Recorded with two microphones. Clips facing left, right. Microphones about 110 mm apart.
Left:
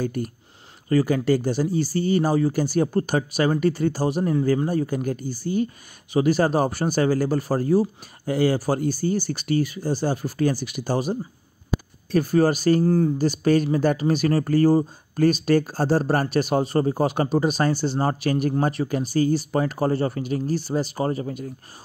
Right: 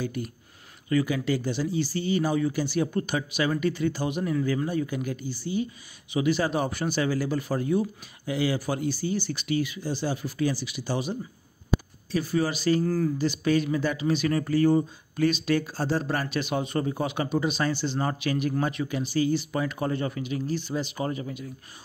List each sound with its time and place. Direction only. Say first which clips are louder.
0.0 s a man's voice: left 5 dB; 45° left (ahead or behind)
12.8 s speech: left 6 dB; 30° left (ahead or behind)
13.2 s a man's voice: left 5 dB; 45° left (ahead or behind)